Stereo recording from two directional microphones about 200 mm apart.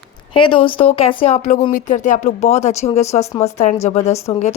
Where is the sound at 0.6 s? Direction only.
25° left (ahead or behind).